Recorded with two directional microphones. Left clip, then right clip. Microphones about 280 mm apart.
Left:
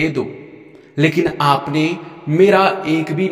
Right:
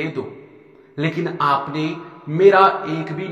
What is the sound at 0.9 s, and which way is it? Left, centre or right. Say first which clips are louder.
Speech: left 7 dB; left.